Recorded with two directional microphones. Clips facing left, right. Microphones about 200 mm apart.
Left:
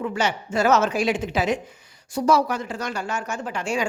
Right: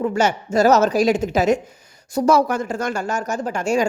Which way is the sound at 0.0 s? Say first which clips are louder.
Right 5 dB; 45° right (ahead or behind).